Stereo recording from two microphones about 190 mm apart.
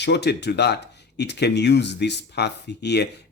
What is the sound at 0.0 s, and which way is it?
Speech, 65° left (ahead or behind).